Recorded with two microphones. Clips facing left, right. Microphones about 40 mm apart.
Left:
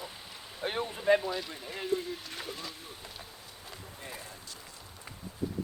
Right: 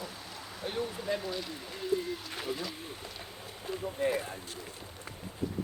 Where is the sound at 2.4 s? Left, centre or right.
Centre.